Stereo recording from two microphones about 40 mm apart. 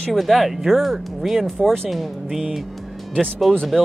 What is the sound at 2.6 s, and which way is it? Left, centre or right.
Music, centre.